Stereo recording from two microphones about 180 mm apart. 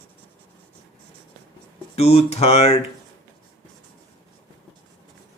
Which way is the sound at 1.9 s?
35° left (ahead or behind).